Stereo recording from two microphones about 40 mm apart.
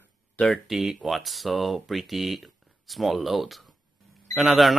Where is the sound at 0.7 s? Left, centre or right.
Centre.